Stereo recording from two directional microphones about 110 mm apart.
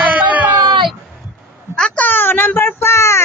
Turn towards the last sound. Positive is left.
turn(degrees=25)  # may be behind; listen again after turning